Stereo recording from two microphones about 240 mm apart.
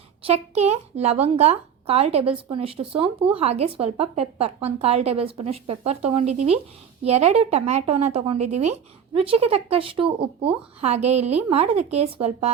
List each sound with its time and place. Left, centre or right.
0.3 s a woman's voice: right